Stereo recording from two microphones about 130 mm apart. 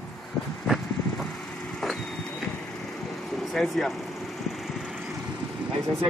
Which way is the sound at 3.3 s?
Centre (ahead or behind).